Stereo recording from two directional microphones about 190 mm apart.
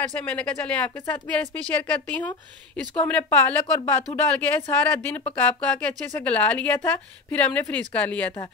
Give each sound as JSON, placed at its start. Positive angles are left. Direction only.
{"t": 0.3, "sound": "speech", "side_deg": 5}